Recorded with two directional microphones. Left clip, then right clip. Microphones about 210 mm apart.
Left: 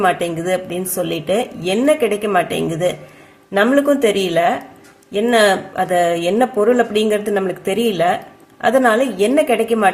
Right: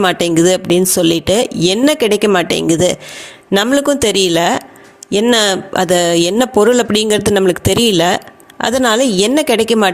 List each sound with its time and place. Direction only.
0.0 s speech: 45° right (ahead or behind)